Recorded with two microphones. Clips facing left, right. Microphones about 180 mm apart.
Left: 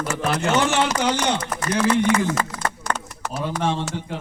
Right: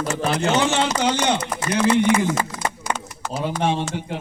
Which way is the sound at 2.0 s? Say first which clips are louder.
Right 1 dB; 15° right (ahead or behind).